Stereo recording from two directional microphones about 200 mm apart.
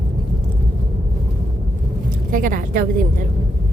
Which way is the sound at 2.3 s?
45° right (ahead or behind).